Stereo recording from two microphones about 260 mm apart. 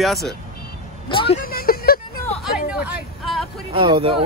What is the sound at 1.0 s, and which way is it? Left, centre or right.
Speech, centre.